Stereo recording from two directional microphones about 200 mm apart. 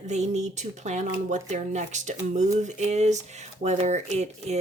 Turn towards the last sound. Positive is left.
turn(degrees=-35)  # may be behind; listen again after turning